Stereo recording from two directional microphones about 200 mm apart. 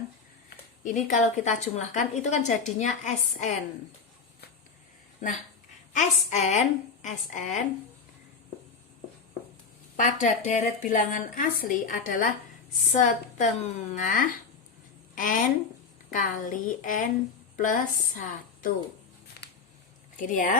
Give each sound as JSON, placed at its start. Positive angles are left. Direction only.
{"t": 0.9, "sound": "a woman's voice", "side_deg": 40}
{"t": 5.9, "sound": "a woman's voice", "side_deg": 35}
{"t": 10.0, "sound": "a woman's voice", "side_deg": 40}
{"t": 20.1, "sound": "a woman's voice", "side_deg": 40}